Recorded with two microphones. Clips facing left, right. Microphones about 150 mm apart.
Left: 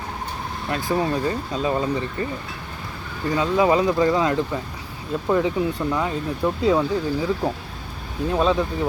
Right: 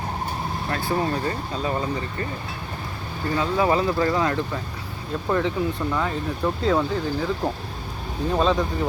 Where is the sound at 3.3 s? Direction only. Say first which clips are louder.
Left 3 dB; 15° left (ahead or behind).